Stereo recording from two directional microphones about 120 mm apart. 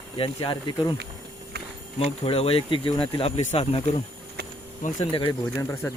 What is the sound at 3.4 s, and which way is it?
Speech, 60° left (ahead or behind).